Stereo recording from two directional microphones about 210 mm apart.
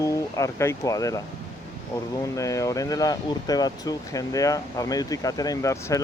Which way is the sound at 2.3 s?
15° left (ahead or behind).